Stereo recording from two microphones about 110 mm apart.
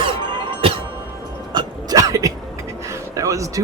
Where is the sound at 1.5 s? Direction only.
40° right (ahead or behind).